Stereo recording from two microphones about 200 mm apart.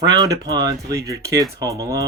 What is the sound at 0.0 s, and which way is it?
Speech, 20° right (ahead or behind).